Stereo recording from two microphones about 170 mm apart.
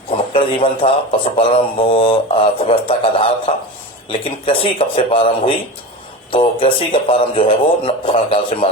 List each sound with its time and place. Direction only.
0.3 s speech: 30° left (ahead or behind)